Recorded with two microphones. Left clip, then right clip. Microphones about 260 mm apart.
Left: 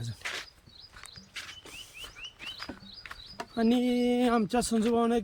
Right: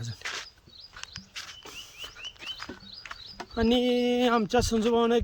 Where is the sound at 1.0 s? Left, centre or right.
Right.